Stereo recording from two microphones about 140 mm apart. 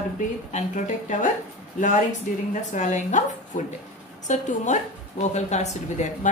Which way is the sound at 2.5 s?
60° left (ahead or behind).